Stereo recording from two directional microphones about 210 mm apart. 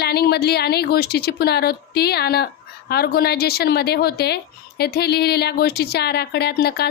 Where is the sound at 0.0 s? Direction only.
50° left (ahead or behind).